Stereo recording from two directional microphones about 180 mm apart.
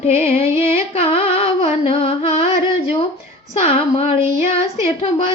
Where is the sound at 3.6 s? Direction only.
35° left (ahead or behind).